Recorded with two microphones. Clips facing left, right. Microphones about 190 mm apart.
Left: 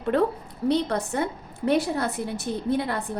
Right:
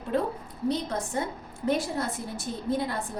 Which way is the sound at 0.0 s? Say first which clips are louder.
Left 6 dB; 70° left (ahead or behind).